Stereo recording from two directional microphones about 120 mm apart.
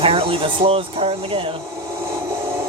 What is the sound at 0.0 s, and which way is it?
Speech, 50° right (ahead or behind).